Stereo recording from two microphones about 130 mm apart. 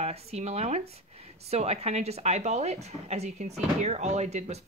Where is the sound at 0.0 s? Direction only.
55° right (ahead or behind).